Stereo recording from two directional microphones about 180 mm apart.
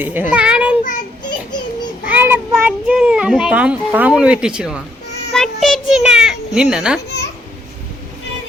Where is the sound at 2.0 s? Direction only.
10° right (ahead or behind).